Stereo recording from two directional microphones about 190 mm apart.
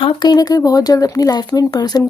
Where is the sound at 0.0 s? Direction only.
25° left (ahead or behind).